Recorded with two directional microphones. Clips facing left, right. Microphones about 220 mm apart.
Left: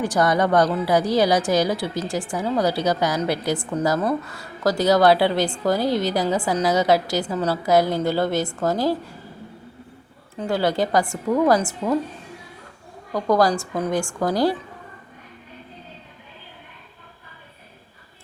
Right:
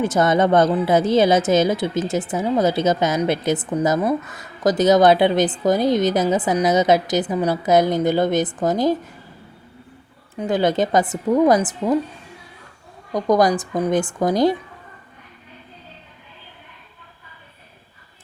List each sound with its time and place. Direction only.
0.0 s a woman's voice: 25° right (ahead or behind)
10.3 s a woman's voice: 20° right (ahead or behind)
13.1 s a woman's voice: 20° right (ahead or behind)